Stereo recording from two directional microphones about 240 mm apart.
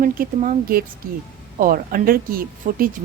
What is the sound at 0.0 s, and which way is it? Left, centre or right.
A woman's voice, right.